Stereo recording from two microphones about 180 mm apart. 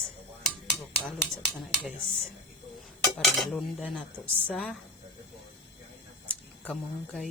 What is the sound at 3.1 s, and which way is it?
Dishes, centre (ahead or behind).